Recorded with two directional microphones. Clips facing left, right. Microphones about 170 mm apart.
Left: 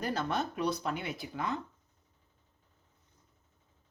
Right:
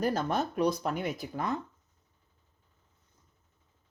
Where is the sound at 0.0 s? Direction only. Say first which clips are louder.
Right 4 dB; 45° right (ahead or behind).